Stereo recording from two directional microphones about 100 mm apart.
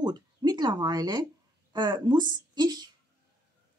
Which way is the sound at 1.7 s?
50° right (ahead or behind).